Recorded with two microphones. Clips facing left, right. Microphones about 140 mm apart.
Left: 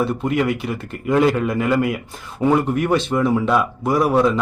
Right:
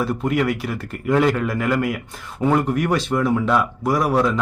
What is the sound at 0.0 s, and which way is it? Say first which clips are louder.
Speech: left 1 dB; centre (ahead or behind).